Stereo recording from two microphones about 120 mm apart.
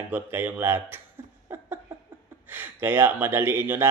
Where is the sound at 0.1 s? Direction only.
20° right (ahead or behind).